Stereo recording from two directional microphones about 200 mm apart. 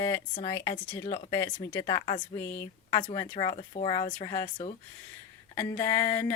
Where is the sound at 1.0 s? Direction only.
35° left (ahead or behind).